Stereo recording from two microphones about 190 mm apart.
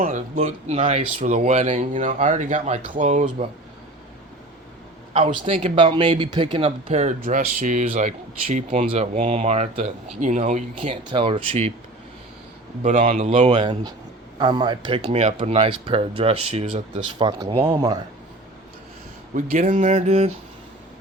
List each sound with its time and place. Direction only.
0.3 s speech: 35° right (ahead or behind)
5.1 s speech: 30° right (ahead or behind)
12.8 s speech: 40° right (ahead or behind); by 17.6 s 25° right (ahead or behind)
19.3 s speech: 45° right (ahead or behind)